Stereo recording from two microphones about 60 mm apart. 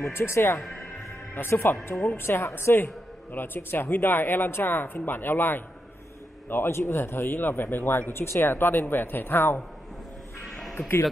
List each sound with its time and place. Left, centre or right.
0.0 s speech: left